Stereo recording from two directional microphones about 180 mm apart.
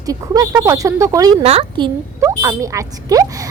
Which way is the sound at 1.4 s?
35° right (ahead or behind).